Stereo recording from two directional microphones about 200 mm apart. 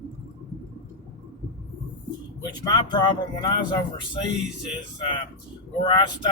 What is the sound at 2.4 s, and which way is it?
Speech, 20° left (ahead or behind).